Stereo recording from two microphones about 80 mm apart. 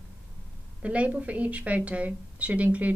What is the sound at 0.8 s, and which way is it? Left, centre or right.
A woman's voice, centre.